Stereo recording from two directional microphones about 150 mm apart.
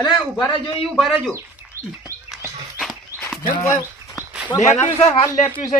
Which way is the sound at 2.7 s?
Centre (ahead or behind).